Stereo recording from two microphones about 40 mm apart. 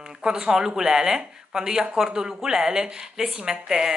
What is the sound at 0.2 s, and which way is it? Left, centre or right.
Speech, centre.